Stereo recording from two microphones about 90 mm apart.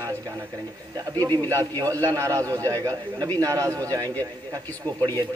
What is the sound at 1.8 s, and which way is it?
A man's voice, 35° right (ahead or behind).